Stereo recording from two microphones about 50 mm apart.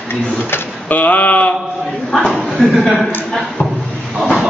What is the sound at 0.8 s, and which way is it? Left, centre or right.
Speech, left.